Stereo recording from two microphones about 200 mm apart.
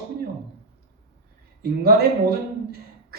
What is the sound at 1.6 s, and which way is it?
Speech, 50° right (ahead or behind).